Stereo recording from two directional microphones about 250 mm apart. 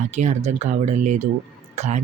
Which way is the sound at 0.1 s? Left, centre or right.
Right.